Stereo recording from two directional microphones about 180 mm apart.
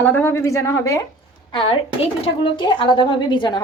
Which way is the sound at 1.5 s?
30° left (ahead or behind).